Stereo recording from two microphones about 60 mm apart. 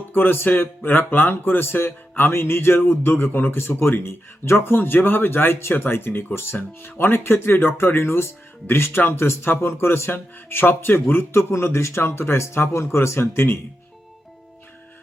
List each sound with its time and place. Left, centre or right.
0.1 s speech: left